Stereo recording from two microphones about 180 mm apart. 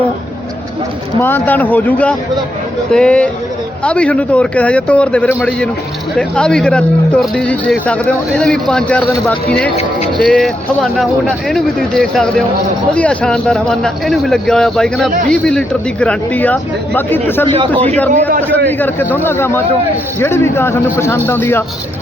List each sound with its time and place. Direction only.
1.2 s speech: 10° left (ahead or behind)
17.5 s a man's voice: 35° right (ahead or behind)
18.8 s speech: 10° left (ahead or behind)